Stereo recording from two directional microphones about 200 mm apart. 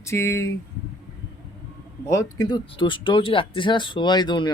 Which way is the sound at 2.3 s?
20° left (ahead or behind).